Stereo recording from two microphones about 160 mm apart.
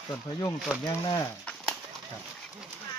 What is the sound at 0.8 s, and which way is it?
Speech, 25° left (ahead or behind).